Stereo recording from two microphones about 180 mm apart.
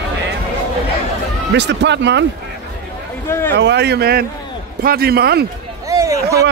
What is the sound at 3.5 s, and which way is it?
A man's voice, 70° right (ahead or behind).